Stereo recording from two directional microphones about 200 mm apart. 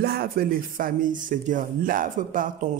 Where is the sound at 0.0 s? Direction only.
50° right (ahead or behind).